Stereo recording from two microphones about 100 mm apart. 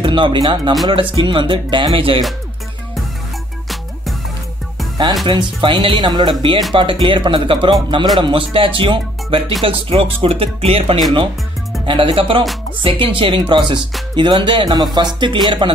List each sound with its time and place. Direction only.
0.0 s speech: 55° right (ahead or behind)
5.2 s speech: 55° right (ahead or behind)
9.7 s speech: 70° right (ahead or behind)
11.8 s speech: 60° right (ahead or behind)